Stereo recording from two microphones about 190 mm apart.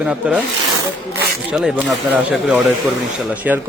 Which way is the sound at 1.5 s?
Centre (ahead or behind).